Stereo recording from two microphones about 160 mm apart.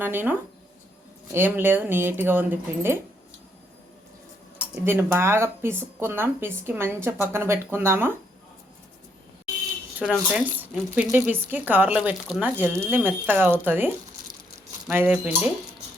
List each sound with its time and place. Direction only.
0.0 s speech: 10° right (ahead or behind)
4.7 s speech: 10° right (ahead or behind)
10.0 s speech: 5° left (ahead or behind)
10.6 s speech: 10° right (ahead or behind)